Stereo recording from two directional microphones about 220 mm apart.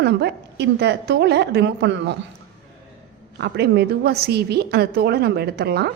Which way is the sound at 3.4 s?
50° right (ahead or behind).